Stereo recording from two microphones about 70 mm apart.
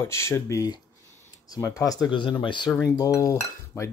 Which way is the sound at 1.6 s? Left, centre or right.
Left.